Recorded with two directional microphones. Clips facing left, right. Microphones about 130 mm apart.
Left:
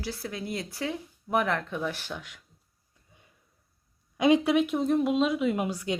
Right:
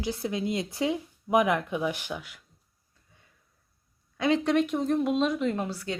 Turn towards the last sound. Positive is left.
turn(degrees=15)  # may be behind; listen again after turning